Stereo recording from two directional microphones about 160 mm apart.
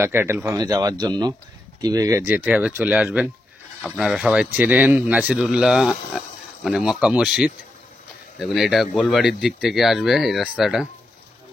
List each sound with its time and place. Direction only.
0.0 s speech: 15° right (ahead or behind)
8.5 s speech: centre (ahead or behind)